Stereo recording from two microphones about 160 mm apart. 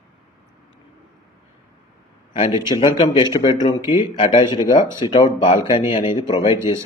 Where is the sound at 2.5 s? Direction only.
25° left (ahead or behind).